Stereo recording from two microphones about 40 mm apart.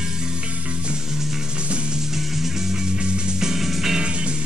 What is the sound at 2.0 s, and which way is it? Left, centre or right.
Music, centre.